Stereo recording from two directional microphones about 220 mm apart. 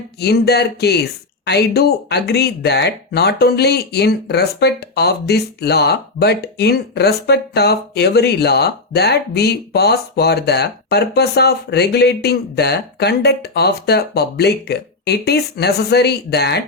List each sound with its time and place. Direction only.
0.2 s speech: 45° left (ahead or behind)